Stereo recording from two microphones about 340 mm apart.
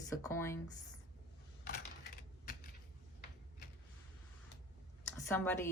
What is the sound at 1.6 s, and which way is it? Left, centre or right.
Typing, left.